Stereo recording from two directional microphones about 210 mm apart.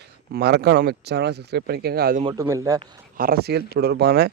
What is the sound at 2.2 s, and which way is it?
Speech, 15° right (ahead or behind).